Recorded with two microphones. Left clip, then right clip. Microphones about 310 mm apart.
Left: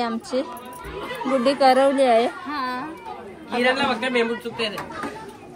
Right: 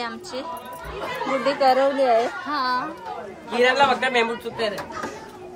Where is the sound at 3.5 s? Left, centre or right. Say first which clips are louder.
Right 3 dB; right.